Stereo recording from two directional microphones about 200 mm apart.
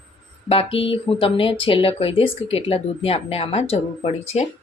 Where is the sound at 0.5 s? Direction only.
25° left (ahead or behind).